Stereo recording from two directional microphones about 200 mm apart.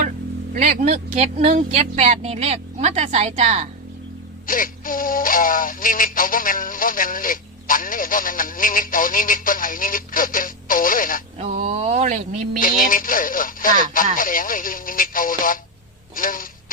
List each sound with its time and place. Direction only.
0.5 s speech: 40° right (ahead or behind)
4.4 s music: 45° left (ahead or behind)
11.3 s speech: 35° right (ahead or behind)
12.5 s music: 45° left (ahead or behind)
16.1 s a sound: 45° left (ahead or behind)